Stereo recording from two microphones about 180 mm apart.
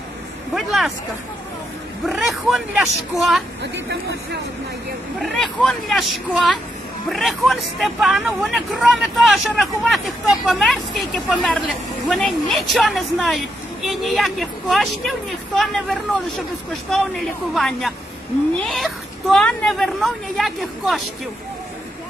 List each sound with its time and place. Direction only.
0.6 s speech: centre (ahead or behind)
2.0 s speech: centre (ahead or behind)
3.6 s speech: 70° right (ahead or behind)
5.2 s speech: 5° left (ahead or behind)